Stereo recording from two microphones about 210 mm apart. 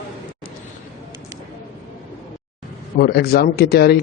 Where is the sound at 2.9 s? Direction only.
45° left (ahead or behind).